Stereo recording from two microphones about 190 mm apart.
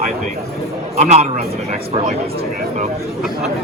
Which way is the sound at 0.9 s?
35° right (ahead or behind).